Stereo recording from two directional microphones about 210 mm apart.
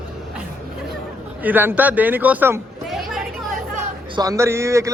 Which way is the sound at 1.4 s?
10° right (ahead or behind).